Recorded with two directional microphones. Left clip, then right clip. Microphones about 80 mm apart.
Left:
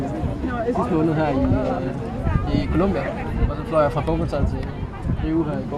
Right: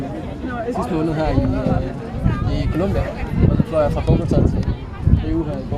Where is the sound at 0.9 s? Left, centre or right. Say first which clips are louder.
Even; right.